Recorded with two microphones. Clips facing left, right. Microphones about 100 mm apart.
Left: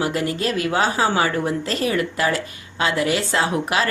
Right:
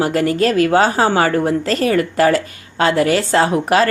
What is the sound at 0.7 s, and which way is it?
A woman's voice, 40° right (ahead or behind).